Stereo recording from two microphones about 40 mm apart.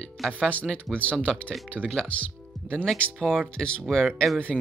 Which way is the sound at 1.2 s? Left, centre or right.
Left.